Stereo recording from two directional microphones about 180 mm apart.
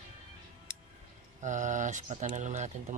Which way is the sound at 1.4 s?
45° right (ahead or behind).